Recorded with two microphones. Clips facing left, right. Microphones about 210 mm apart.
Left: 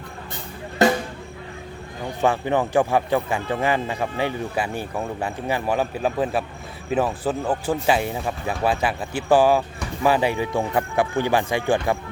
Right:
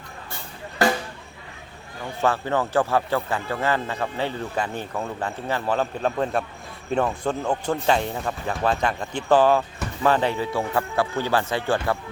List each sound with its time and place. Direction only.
0.8 s drum: 20° left (ahead or behind)
2.2 s speech: 15° left (ahead or behind)